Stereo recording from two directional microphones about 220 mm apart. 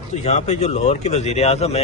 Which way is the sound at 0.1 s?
30° left (ahead or behind).